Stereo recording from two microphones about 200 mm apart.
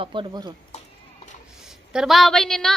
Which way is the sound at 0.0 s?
25° right (ahead or behind).